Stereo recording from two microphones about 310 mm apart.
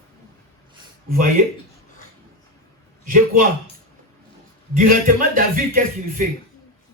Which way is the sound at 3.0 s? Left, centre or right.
Right.